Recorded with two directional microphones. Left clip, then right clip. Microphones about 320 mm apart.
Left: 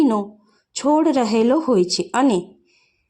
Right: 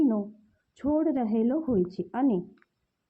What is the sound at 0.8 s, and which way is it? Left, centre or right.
Speech, centre.